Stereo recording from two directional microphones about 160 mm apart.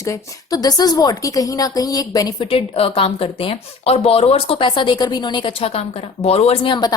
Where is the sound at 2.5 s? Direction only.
35° left (ahead or behind).